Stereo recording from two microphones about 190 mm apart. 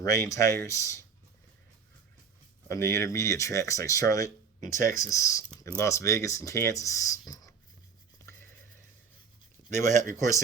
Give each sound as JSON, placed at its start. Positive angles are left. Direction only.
{"t": 0.0, "sound": "speech", "side_deg": 15}
{"t": 2.6, "sound": "speech", "side_deg": 15}
{"t": 9.8, "sound": "speech", "side_deg": -40}